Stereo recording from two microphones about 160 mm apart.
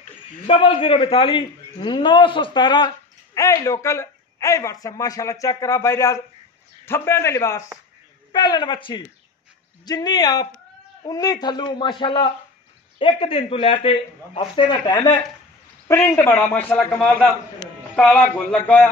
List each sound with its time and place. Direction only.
0.5 s a man's voice: 35° left (ahead or behind); by 18.9 s 10° left (ahead or behind)